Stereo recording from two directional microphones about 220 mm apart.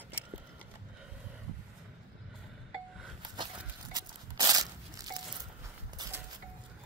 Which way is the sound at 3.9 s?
20° right (ahead or behind).